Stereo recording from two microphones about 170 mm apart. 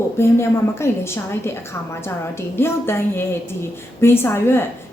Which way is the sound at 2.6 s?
15° left (ahead or behind).